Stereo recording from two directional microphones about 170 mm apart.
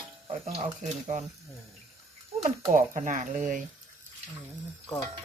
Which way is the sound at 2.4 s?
45° right (ahead or behind).